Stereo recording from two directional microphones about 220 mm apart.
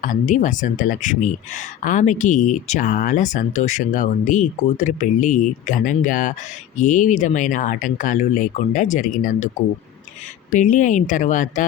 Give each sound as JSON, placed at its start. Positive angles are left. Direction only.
{"t": 0.0, "sound": "speech", "side_deg": 35}
{"t": 10.5, "sound": "speech", "side_deg": 35}